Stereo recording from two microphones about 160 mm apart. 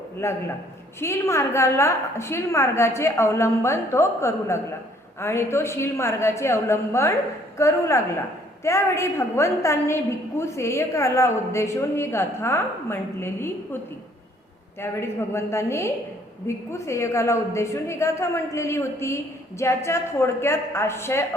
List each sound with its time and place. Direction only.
0.2 s a woman's voice: 15° left (ahead or behind)
14.8 s a woman's voice: 15° left (ahead or behind)